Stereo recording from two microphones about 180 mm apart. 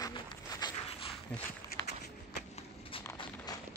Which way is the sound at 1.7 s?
55° left (ahead or behind).